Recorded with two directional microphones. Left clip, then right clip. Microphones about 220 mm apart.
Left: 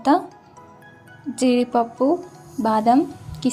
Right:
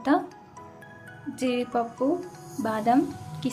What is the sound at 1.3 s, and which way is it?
Speech, 20° left (ahead or behind).